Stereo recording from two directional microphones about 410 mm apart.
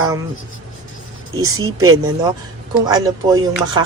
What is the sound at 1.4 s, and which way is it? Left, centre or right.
Speech, right.